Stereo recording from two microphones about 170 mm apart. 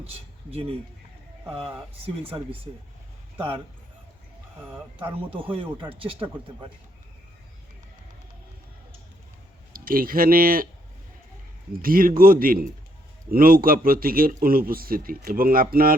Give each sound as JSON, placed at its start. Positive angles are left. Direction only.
{"t": 0.0, "sound": "a sound", "side_deg": -35}
{"t": 2.0, "sound": "speech", "side_deg": -35}
{"t": 4.9, "sound": "speech", "side_deg": -30}
{"t": 9.7, "sound": "a man's voice", "side_deg": -55}
{"t": 11.8, "sound": "a man's voice", "side_deg": -55}